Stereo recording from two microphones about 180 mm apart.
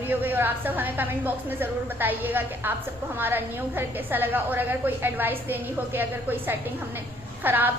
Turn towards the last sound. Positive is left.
turn(degrees=-10)  # may be behind; listen again after turning